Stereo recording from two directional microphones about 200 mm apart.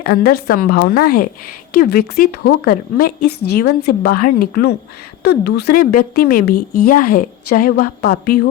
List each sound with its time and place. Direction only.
0.0 s a woman's voice: 50° left (ahead or behind)